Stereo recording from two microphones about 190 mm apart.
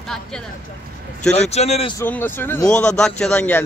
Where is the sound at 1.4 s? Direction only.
35° left (ahead or behind).